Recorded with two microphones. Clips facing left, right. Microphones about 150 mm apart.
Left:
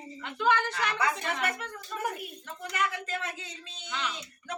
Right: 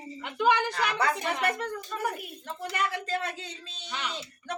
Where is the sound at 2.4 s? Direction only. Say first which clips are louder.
Right 1 dB; 30° right (ahead or behind).